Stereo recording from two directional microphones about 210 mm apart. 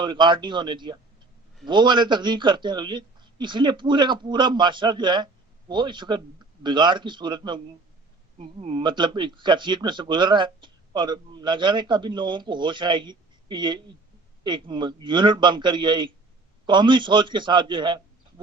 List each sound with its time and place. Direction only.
0.0 s a man's voice: 20° right (ahead or behind)